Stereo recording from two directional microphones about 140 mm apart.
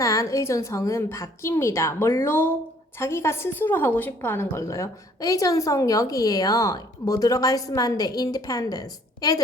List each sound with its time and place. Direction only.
0.0 s a woman's voice: 25° left (ahead or behind)